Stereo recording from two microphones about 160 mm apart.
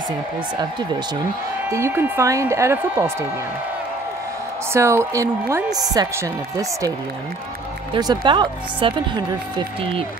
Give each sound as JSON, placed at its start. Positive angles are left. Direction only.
{"t": 1.7, "sound": "speech", "side_deg": -15}
{"t": 4.7, "sound": "a woman's voice", "side_deg": -15}
{"t": 7.9, "sound": "a woman's voice", "side_deg": -30}